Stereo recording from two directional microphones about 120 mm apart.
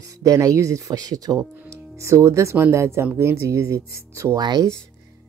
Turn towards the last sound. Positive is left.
turn(degrees=-35)  # may be behind; listen again after turning